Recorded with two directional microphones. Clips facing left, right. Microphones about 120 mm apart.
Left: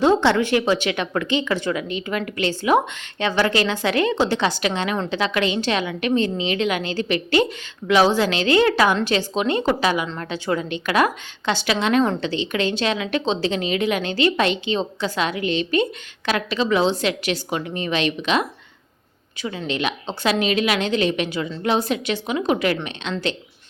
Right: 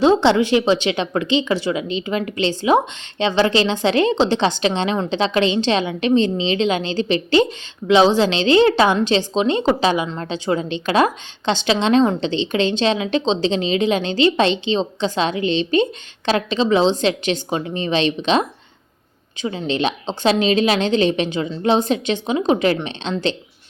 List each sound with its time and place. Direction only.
0.0 s a woman's voice: 20° right (ahead or behind)